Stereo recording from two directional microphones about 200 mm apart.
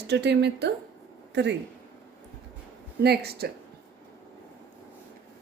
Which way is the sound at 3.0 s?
55° right (ahead or behind).